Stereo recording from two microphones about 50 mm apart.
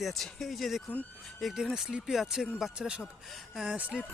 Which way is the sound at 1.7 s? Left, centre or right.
Centre.